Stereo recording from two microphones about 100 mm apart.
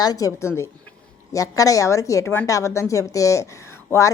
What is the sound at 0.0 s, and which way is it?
A woman's voice, 40° left (ahead or behind).